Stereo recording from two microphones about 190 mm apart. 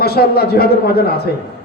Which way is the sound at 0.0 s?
55° left (ahead or behind).